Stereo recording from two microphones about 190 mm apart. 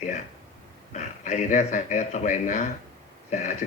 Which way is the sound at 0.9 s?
40° left (ahead or behind).